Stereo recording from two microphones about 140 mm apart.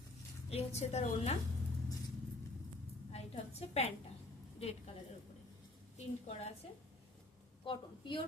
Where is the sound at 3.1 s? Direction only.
50° left (ahead or behind).